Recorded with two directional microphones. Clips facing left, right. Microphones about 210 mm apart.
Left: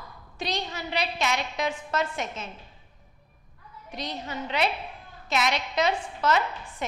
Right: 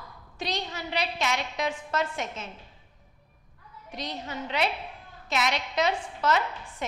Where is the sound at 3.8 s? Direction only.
10° left (ahead or behind).